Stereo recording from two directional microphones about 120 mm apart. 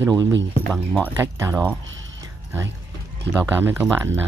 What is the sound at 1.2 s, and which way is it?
Speech, 20° right (ahead or behind).